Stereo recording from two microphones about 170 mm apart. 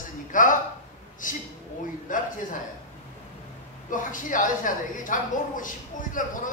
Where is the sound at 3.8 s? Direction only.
50° left (ahead or behind).